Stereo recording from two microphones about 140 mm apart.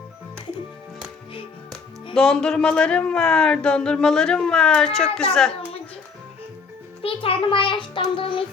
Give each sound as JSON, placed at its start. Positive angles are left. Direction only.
{"t": 2.1, "sound": "speech", "side_deg": 5}
{"t": 7.0, "sound": "music", "side_deg": 40}